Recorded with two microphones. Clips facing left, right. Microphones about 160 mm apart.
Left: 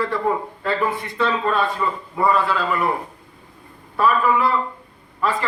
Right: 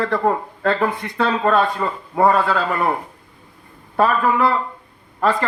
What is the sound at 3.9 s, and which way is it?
Speech, 55° right (ahead or behind).